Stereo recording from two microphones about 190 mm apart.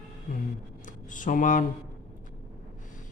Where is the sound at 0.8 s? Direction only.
40° left (ahead or behind).